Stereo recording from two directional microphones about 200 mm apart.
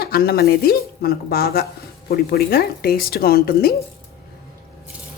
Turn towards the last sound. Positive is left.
turn(degrees=50)  # may be behind; listen again after turning